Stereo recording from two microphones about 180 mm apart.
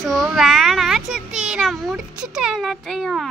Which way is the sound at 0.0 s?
Centre (ahead or behind).